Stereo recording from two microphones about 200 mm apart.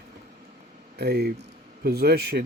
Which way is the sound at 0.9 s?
50° right (ahead or behind).